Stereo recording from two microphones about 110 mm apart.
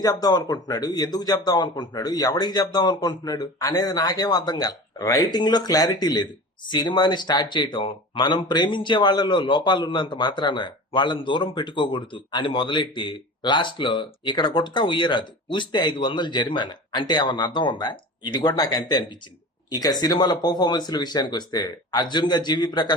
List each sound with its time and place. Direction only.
0.0 s speech: 35° left (ahead or behind)